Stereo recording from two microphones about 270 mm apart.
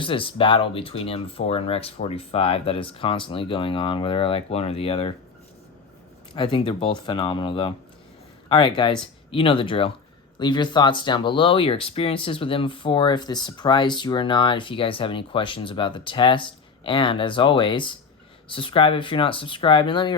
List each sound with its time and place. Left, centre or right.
0.0 s speech: centre
6.3 s speech: centre